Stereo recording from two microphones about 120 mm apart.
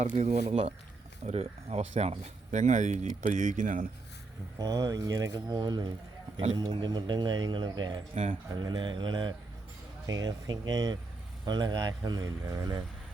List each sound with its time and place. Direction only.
0.2 s speech: 65° right (ahead or behind); by 3.8 s 90° right
4.5 s speech: 30° right (ahead or behind)